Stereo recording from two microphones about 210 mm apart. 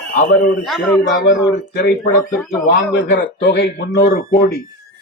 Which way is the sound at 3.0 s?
55° left (ahead or behind).